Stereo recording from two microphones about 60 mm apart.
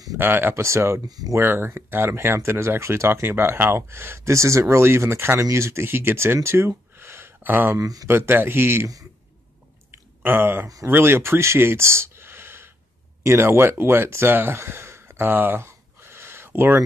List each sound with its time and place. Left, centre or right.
0.2 s speech: right
0.6 s speech: right
1.0 s speech: right
1.4 s speech: right
5.9 s speech: right
7.8 s speech: right
8.1 s speech: right
9.8 s a sound: right
10.9 s speech: right
15.6 s gasp: right